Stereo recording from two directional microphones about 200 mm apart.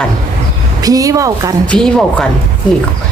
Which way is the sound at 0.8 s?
15° right (ahead or behind).